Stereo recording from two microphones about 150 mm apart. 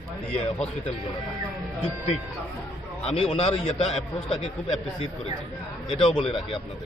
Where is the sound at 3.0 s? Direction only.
40° left (ahead or behind).